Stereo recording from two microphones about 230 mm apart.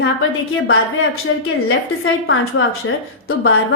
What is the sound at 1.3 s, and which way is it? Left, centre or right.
A woman's voice, left.